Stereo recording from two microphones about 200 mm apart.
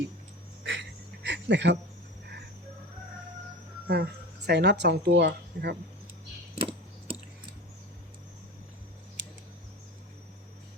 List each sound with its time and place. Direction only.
0.6 s a sound: 65° right (ahead or behind)
3.8 s speech: 55° right (ahead or behind)
6.6 s computer keyboard: 25° right (ahead or behind)